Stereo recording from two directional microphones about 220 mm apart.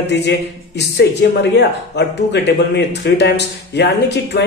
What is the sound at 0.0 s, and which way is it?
Speech, 50° left (ahead or behind).